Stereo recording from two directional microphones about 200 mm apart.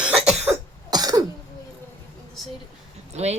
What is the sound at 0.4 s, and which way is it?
Cough, 20° right (ahead or behind).